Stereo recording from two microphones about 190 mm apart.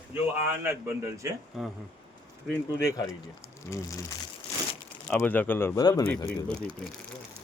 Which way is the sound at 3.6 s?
15° left (ahead or behind).